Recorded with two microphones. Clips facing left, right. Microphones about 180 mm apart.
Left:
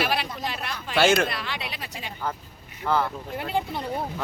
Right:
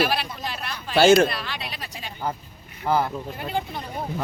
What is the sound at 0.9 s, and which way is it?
Speech, 35° right (ahead or behind).